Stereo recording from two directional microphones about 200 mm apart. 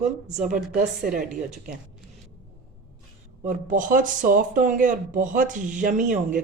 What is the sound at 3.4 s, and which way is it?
Speech, 40° right (ahead or behind).